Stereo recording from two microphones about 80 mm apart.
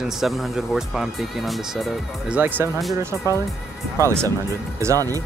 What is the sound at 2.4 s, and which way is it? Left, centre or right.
Speech, right.